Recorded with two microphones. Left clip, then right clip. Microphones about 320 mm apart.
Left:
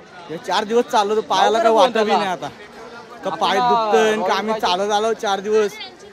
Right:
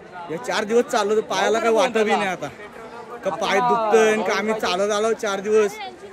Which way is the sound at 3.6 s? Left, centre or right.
Left.